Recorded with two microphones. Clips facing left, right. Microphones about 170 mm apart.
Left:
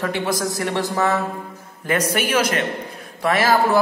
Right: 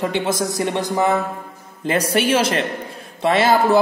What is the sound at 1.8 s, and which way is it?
A man's voice, 30° right (ahead or behind).